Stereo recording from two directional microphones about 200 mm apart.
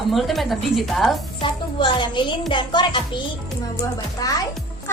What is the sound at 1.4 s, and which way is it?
A woman's voice, 25° left (ahead or behind).